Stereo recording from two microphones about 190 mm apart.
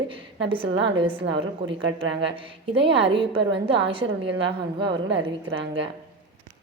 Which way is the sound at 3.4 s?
65° right (ahead or behind).